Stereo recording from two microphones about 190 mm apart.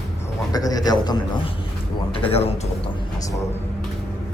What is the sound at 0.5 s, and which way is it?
Speech, 20° left (ahead or behind).